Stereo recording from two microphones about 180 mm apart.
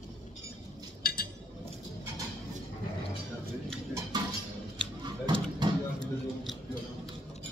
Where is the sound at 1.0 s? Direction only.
55° left (ahead or behind).